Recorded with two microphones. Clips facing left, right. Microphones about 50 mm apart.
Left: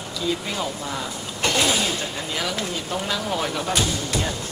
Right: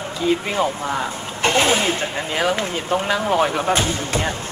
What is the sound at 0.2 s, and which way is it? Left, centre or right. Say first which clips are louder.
Speech: right 7 dB; right.